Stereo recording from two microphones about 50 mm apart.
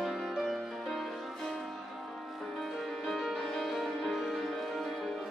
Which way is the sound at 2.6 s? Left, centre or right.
Centre.